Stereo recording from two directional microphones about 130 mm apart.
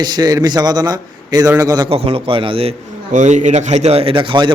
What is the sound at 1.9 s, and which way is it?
Speech, 45° right (ahead or behind).